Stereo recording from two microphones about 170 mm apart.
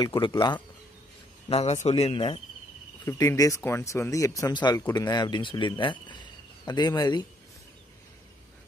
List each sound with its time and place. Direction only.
0.0 s speech: 25° left (ahead or behind)
1.5 s a man's voice: 40° left (ahead or behind)
2.0 s speech: 30° left (ahead or behind)
3.1 s speech: 20° left (ahead or behind)